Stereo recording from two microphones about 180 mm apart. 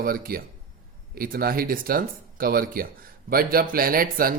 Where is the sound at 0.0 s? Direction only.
55° right (ahead or behind).